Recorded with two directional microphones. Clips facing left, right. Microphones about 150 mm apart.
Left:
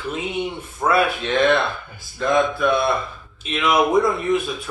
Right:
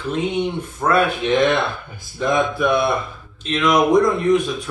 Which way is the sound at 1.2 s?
15° right (ahead or behind).